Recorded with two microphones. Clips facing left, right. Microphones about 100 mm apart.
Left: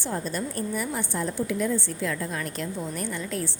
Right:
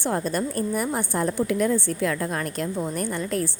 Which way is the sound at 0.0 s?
55° right (ahead or behind).